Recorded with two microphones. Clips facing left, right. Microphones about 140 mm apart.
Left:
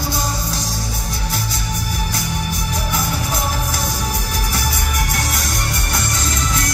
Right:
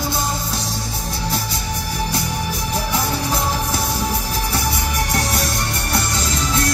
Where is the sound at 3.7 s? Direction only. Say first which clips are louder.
Right 2 dB; 30° right (ahead or behind).